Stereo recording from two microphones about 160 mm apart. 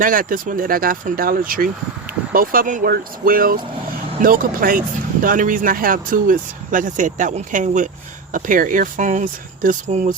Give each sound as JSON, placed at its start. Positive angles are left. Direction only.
{"t": 0.0, "sound": "speech", "side_deg": -60}